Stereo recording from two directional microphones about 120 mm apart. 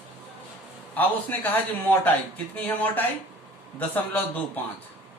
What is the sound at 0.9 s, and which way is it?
A man's voice, 15° left (ahead or behind).